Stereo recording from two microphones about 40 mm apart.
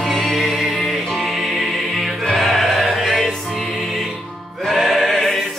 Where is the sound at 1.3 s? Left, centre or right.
Centre.